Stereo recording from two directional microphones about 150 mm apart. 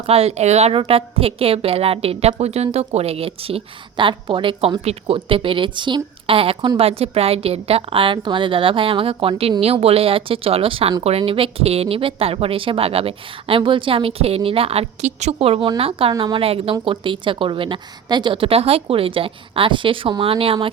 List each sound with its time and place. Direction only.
0.0 s a woman's voice: 45° right (ahead or behind)